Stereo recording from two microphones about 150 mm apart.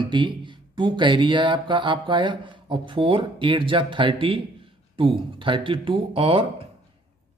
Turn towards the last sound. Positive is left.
turn(degrees=-35)  # may be behind; listen again after turning